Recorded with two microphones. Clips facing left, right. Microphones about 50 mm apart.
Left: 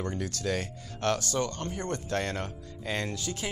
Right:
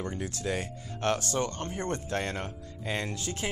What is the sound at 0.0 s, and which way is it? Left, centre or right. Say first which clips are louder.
Speech: left 1 dB; right.